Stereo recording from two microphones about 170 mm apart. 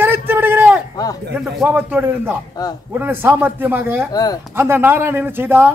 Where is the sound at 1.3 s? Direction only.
5° right (ahead or behind).